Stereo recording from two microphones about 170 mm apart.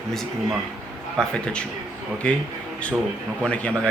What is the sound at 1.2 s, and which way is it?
Speech, 5° left (ahead or behind).